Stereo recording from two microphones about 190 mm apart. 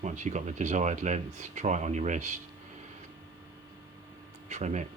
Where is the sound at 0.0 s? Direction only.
40° right (ahead or behind).